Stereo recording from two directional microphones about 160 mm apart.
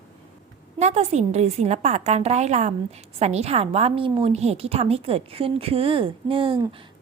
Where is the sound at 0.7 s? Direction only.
45° right (ahead or behind).